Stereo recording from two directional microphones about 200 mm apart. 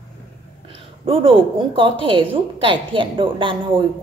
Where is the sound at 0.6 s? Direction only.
25° right (ahead or behind).